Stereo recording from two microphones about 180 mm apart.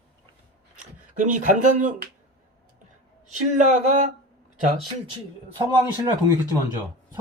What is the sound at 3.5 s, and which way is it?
Speech, 40° right (ahead or behind).